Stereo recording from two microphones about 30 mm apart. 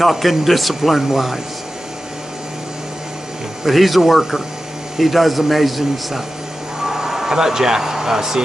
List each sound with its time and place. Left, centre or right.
0.0 s speech: centre
3.6 s speech: centre